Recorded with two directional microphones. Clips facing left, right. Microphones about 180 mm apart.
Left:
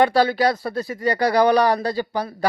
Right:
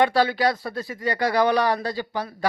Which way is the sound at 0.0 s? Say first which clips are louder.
Left 3 dB; 40° left (ahead or behind).